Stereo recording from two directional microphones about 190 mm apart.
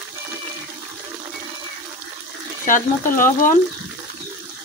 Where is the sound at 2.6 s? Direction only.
45° left (ahead or behind).